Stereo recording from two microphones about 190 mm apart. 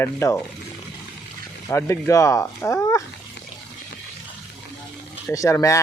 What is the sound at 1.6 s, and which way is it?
Speech, 15° left (ahead or behind).